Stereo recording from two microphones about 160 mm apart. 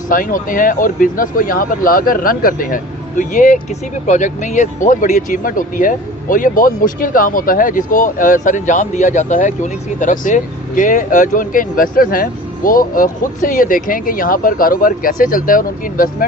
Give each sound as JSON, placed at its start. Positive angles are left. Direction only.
{"t": 0.1, "sound": "speech", "side_deg": 60}